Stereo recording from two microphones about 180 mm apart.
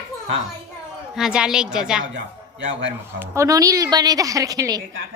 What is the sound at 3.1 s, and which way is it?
A woman's voice, 15° right (ahead or behind).